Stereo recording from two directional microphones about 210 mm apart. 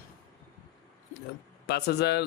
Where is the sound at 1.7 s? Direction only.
50° left (ahead or behind).